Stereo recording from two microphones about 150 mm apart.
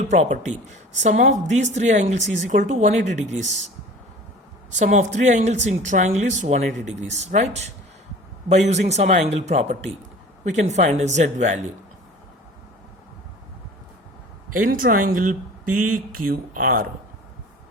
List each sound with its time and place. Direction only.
0.1 s a woman's voice: 50° right (ahead or behind)
4.8 s a woman's voice: 50° right (ahead or behind)
14.5 s speech: 65° right (ahead or behind)